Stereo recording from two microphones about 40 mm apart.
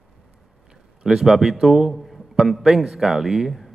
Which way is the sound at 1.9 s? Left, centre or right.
Centre.